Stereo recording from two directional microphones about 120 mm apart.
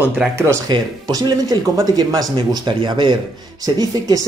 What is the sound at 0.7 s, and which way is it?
Speech, 35° right (ahead or behind).